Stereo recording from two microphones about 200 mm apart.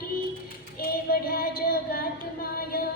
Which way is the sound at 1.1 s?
50° left (ahead or behind).